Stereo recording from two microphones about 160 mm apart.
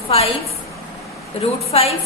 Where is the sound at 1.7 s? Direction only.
40° left (ahead or behind).